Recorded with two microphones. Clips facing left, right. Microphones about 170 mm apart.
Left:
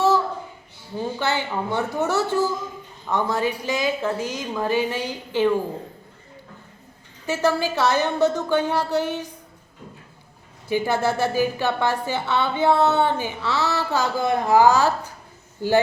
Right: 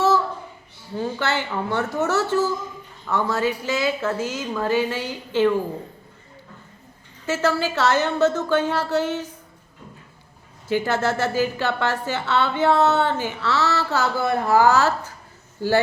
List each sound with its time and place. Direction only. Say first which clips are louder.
0.9 s a woman's voice: even; 15° left (ahead or behind)
7.3 s a woman's voice: even; 15° left (ahead or behind)
10.7 s a woman's voice: even; 15° left (ahead or behind)